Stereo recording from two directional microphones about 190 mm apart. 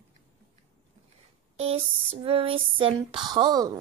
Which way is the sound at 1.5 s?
30° right (ahead or behind).